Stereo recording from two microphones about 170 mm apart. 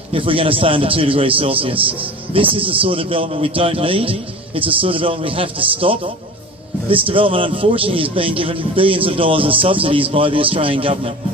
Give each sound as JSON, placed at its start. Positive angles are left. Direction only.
{"t": 0.1, "sound": "a man's voice", "side_deg": -30}